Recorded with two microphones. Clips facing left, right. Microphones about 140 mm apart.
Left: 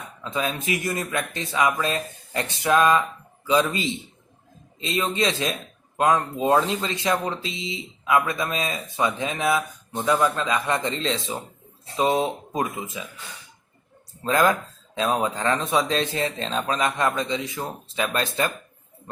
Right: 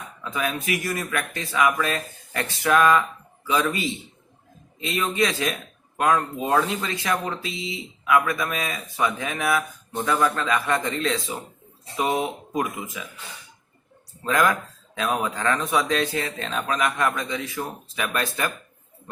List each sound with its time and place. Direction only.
0.2 s speech: 25° left (ahead or behind)
14.3 s speech: 30° left (ahead or behind)